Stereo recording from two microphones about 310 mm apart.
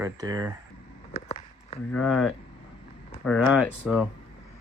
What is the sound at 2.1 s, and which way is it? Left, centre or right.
Speech, centre.